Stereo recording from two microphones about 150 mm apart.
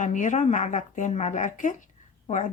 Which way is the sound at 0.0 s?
55° left (ahead or behind).